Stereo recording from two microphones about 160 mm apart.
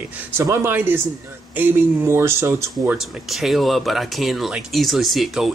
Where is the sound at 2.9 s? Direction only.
Centre (ahead or behind).